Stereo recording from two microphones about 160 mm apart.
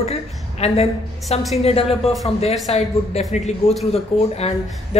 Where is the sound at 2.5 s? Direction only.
Centre (ahead or behind).